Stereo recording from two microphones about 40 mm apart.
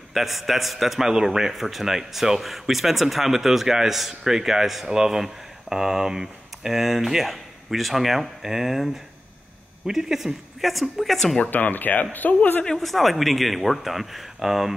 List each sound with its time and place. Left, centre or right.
0.1 s a man's voice: centre
11.5 s speech: left
12.7 s speech: centre